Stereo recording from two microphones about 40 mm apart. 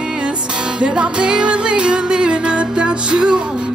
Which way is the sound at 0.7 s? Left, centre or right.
Right.